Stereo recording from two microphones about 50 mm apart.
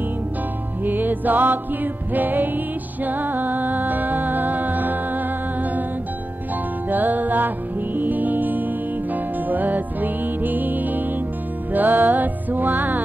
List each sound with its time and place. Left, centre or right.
0.8 s music: right
6.9 s music: right